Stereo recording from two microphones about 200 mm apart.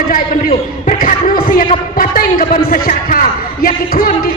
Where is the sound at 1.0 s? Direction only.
45° left (ahead or behind).